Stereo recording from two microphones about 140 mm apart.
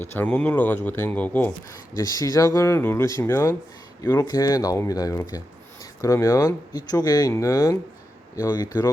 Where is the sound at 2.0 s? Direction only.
25° left (ahead or behind).